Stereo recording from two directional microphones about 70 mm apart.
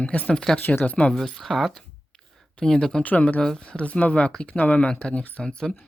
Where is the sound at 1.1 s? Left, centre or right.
Centre.